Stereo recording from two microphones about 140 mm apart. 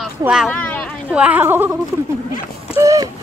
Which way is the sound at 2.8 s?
25° right (ahead or behind).